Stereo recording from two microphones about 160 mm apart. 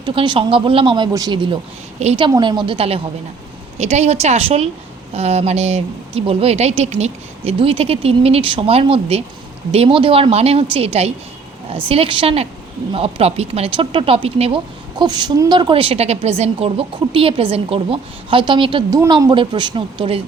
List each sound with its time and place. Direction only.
0.0 s a woman's voice: 30° right (ahead or behind)
14.9 s a woman's voice: 25° right (ahead or behind)